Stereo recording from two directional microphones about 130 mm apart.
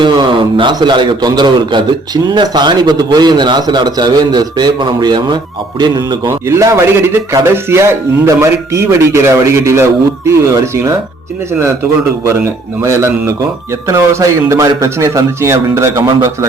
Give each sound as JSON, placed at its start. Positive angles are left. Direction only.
{"t": 0.0, "sound": "a man's voice", "side_deg": -40}
{"t": 6.2, "sound": "speech", "side_deg": -20}
{"t": 12.8, "sound": "speech", "side_deg": -20}